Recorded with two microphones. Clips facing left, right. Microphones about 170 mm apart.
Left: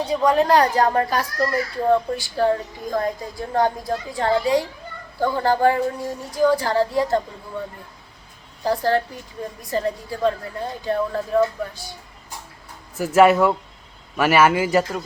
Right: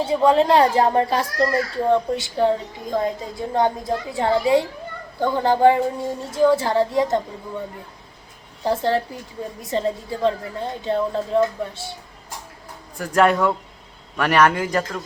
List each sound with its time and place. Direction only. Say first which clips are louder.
0.0 s a woman's voice: right 2 dB; 25° right (ahead or behind)
8.6 s a woman's voice: even; 25° right (ahead or behind)
13.0 s a man's voice: left 3 dB; 5° left (ahead or behind)